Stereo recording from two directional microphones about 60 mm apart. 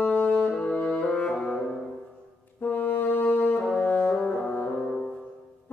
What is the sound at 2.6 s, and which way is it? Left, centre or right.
Brass instrument, left.